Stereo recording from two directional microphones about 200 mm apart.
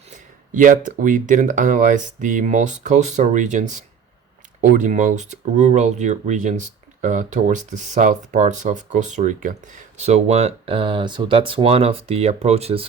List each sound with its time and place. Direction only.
0.1 s speech: 40° right (ahead or behind)